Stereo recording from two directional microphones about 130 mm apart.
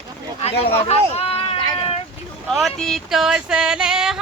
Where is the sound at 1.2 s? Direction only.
50° left (ahead or behind).